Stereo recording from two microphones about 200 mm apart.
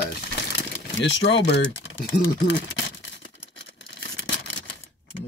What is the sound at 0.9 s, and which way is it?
Speech, 60° left (ahead or behind).